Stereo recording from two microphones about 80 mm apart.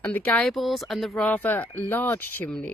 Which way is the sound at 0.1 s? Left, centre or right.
Centre.